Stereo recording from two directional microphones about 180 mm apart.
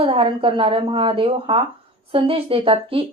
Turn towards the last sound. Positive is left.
turn(degrees=-30)  # may be behind; listen again after turning